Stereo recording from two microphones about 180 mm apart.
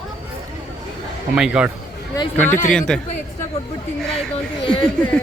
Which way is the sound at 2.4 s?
45° left (ahead or behind).